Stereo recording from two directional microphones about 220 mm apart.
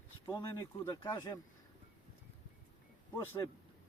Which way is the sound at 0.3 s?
20° left (ahead or behind).